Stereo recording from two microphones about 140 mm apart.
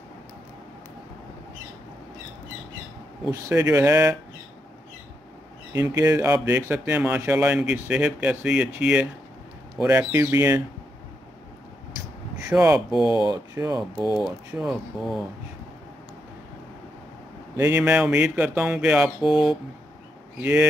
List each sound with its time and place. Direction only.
3.3 s speech: 20° right (ahead or behind)
5.7 s speech: 25° right (ahead or behind)
12.5 s speech: 20° right (ahead or behind)
14.2 s speech: 10° right (ahead or behind)
17.6 s speech: 10° right (ahead or behind)